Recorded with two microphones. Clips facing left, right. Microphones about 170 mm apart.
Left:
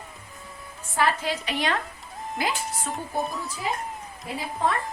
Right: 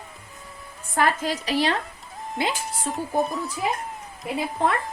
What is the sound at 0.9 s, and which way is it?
Dishes, 40° right (ahead or behind).